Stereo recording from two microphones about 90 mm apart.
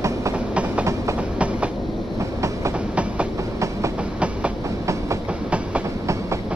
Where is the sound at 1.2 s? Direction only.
15° right (ahead or behind).